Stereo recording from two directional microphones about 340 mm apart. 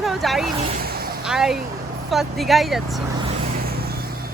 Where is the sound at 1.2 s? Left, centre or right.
Centre.